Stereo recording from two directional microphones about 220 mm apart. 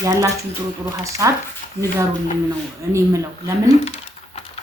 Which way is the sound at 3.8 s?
30° left (ahead or behind).